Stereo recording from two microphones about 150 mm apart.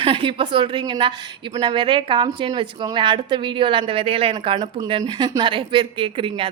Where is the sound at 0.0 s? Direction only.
35° right (ahead or behind).